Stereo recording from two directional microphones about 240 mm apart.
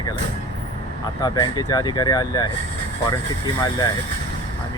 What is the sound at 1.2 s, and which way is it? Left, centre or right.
Speech, centre.